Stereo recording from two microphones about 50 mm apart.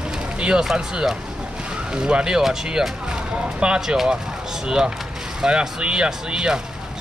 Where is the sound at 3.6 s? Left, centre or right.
Centre.